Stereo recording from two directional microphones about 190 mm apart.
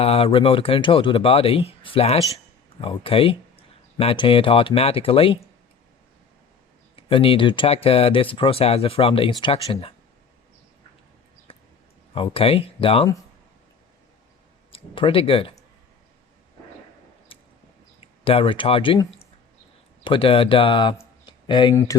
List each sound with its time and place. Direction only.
0.0 s speech: 30° left (ahead or behind)
6.9 s speech: 30° left (ahead or behind)
11.5 s a sound: 30° left (ahead or behind)
12.1 s speech: 30° left (ahead or behind)
14.7 s speech: 25° left (ahead or behind)
17.3 s vehicle: 30° left (ahead or behind)
18.0 s speech: 30° left (ahead or behind)
21.0 s a sound: 25° left (ahead or behind)